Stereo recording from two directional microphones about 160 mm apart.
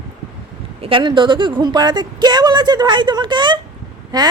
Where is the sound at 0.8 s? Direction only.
30° right (ahead or behind).